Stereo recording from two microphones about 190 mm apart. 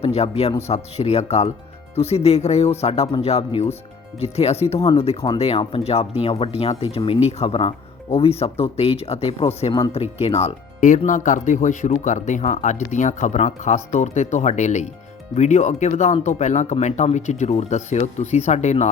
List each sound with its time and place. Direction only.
0.0 s speech: 35° left (ahead or behind)